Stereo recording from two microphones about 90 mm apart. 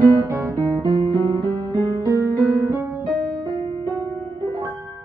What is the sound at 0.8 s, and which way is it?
Music, 65° right (ahead or behind).